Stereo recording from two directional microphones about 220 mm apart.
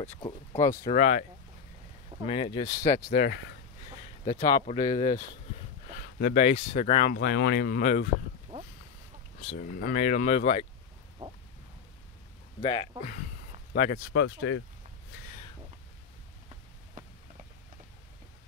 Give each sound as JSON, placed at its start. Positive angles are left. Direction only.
{"t": 0.2, "sound": "speech", "side_deg": 20}
{"t": 0.9, "sound": "speech", "side_deg": 30}
{"t": 2.2, "sound": "speech", "side_deg": 25}
{"t": 3.1, "sound": "speech", "side_deg": 35}
{"t": 6.4, "sound": "speech", "side_deg": 30}
{"t": 7.2, "sound": "speech", "side_deg": 50}
{"t": 9.6, "sound": "speech", "side_deg": 40}
{"t": 11.2, "sound": "a sound", "side_deg": -20}
{"t": 12.6, "sound": "speech", "side_deg": 25}
{"t": 13.7, "sound": "speech", "side_deg": 40}
{"t": 14.1, "sound": "speech", "side_deg": 65}